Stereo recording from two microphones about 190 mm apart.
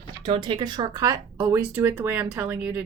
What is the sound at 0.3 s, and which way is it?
Speech, 25° right (ahead or behind).